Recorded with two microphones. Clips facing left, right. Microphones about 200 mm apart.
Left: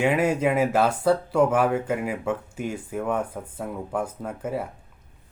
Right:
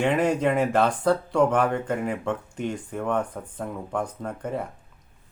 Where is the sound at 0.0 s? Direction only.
5° left (ahead or behind).